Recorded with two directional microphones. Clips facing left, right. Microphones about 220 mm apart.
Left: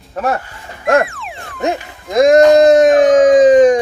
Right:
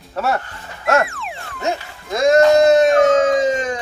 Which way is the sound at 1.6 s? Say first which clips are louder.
Left 5 dB; 15° left (ahead or behind).